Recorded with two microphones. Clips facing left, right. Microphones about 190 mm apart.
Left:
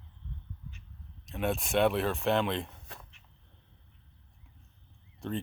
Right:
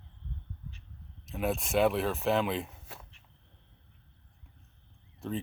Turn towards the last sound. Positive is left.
turn(degrees=0)  # may be behind; listen again after turning